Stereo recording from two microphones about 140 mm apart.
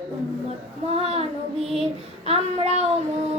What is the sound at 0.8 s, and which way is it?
Child singing, 45° right (ahead or behind).